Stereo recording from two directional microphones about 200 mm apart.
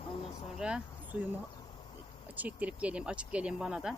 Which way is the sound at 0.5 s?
5° right (ahead or behind).